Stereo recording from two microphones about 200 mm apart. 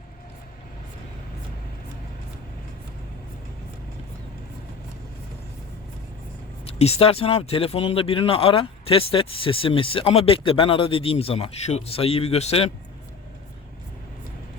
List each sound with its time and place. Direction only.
6.7 s speech: 30° left (ahead or behind)